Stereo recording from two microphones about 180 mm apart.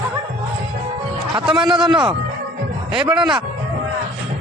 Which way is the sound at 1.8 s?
5° right (ahead or behind).